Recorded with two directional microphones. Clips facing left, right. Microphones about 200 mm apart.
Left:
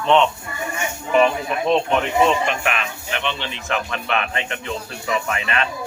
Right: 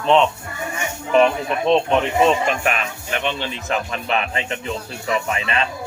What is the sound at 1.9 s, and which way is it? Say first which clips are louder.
Speech: right 1 dB; 35° right (ahead or behind).